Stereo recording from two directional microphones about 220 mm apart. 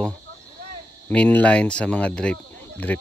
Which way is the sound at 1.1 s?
5° left (ahead or behind).